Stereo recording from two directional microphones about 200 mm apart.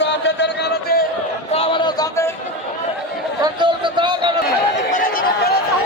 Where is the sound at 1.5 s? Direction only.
25° left (ahead or behind).